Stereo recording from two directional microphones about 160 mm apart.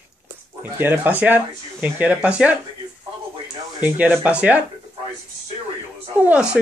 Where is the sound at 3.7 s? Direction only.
10° right (ahead or behind).